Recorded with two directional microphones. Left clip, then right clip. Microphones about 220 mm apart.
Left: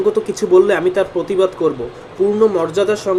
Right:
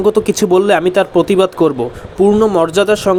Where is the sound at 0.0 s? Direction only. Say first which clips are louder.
Right 4 dB; 35° right (ahead or behind).